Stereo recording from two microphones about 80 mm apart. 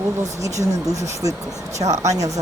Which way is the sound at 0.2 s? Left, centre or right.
Right.